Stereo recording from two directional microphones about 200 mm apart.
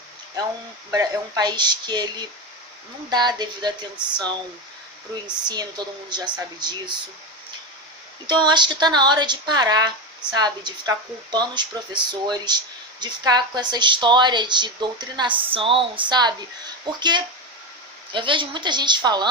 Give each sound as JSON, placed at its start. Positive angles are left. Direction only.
{"t": 0.9, "sound": "speech", "side_deg": -20}
{"t": 5.5, "sound": "speech", "side_deg": -20}
{"t": 8.3, "sound": "speech", "side_deg": -20}